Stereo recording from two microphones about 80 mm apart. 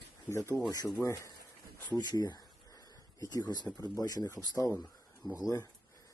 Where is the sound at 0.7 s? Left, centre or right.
Left.